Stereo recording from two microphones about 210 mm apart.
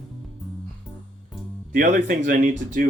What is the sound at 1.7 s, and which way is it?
Speech, 40° right (ahead or behind).